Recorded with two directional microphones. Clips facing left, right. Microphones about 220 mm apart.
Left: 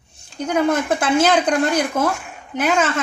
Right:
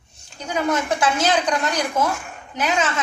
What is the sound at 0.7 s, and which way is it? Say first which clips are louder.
Speech: left 3 dB; 55° left (ahead or behind).